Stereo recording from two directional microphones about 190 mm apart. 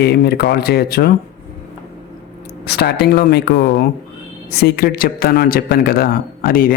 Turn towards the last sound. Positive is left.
turn(degrees=50)  # may be behind; listen again after turning